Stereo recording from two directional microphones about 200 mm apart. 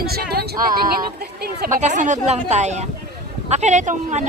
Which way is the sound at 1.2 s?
50° right (ahead or behind).